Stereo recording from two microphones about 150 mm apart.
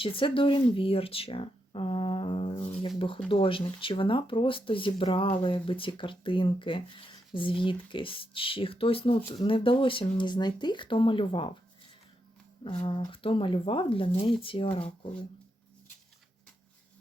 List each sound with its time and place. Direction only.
0.0 s speech: 35° left (ahead or behind)
12.6 s speech: 35° left (ahead or behind)